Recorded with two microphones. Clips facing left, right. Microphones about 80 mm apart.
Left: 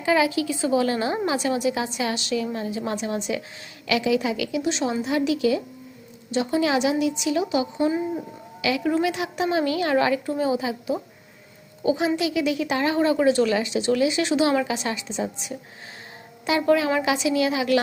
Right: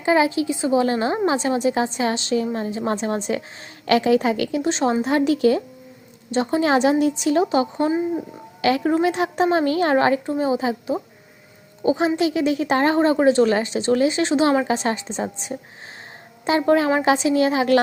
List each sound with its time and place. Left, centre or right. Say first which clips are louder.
0.0 s a woman's voice: right 3 dB; right